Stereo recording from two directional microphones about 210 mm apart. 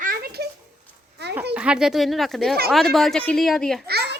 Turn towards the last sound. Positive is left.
turn(degrees=-50)  # may be behind; listen again after turning